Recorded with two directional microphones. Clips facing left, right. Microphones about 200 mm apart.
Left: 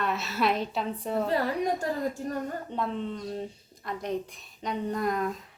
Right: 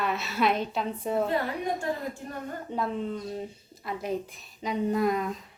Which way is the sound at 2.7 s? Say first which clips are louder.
Right 4 dB; 5° right (ahead or behind).